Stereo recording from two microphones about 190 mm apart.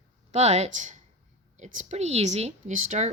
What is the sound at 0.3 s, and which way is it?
Speech, 35° right (ahead or behind).